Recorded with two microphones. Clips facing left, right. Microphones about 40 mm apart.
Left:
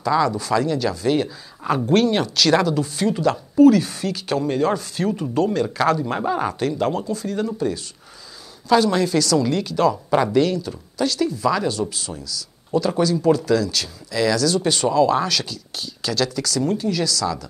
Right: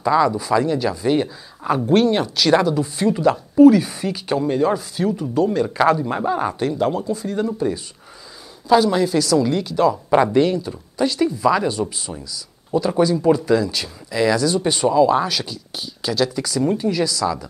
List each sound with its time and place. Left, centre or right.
0.0 s speech: centre
1.6 s speech: centre